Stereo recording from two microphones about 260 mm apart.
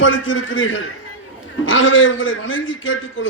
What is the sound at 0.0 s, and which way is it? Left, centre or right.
A man's voice, left.